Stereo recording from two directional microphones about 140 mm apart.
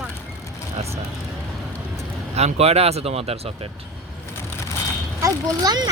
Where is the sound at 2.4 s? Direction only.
50° right (ahead or behind).